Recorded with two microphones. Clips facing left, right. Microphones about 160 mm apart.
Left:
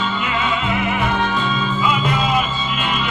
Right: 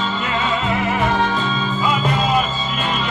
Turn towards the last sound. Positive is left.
turn(degrees=-35)  # may be behind; listen again after turning